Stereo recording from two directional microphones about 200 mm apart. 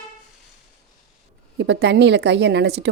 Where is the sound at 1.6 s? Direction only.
60° right (ahead or behind).